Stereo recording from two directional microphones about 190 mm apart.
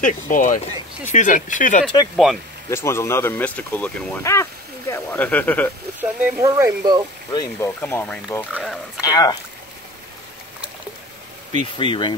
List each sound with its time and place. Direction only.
0.0 s speech: 40° left (ahead or behind)
2.7 s speech: 15° left (ahead or behind)
5.9 s speech: 10° right (ahead or behind)
7.3 s speech: 15° left (ahead or behind)
8.5 s speech: 5° right (ahead or behind)
9.0 s speech: 20° left (ahead or behind)
11.5 s speech: 25° left (ahead or behind)